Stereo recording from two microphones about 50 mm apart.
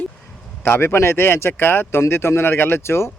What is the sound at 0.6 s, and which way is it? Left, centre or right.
Speech, left.